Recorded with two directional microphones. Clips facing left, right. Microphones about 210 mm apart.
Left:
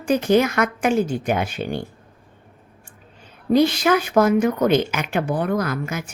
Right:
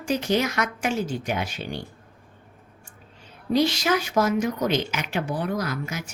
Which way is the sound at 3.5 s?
55° left (ahead or behind).